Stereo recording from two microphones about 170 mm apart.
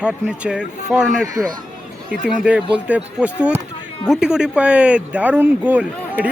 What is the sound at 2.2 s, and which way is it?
Speech, 5° right (ahead or behind).